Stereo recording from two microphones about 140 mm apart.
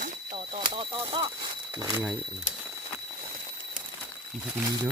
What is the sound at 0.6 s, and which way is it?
Speech, 35° right (ahead or behind).